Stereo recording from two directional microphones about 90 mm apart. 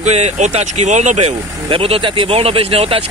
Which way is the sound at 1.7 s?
90° right.